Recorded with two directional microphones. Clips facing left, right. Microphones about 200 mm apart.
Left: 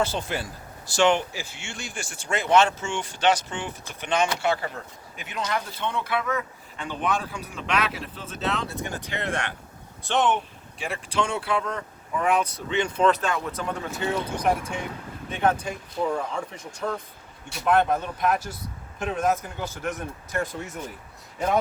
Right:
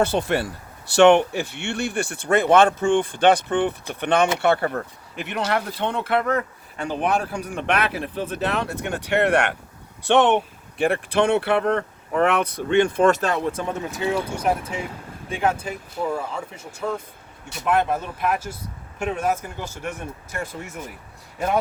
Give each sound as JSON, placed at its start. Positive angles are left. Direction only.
{"t": 0.0, "sound": "speech", "side_deg": -60}
{"t": 13.2, "sound": "speech", "side_deg": -35}
{"t": 14.2, "sound": "speech", "side_deg": -5}